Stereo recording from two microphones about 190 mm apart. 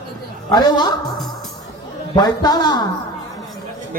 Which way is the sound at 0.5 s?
20° left (ahead or behind).